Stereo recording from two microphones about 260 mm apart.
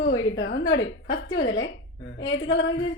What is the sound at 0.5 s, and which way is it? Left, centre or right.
A woman's voice, left.